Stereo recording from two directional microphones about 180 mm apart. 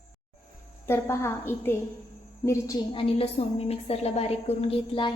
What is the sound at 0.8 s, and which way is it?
A woman's voice, 15° left (ahead or behind).